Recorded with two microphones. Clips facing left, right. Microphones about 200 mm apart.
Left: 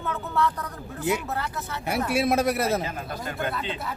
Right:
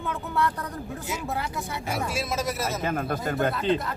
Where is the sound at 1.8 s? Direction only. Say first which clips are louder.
Left 7 dB; 60° left (ahead or behind).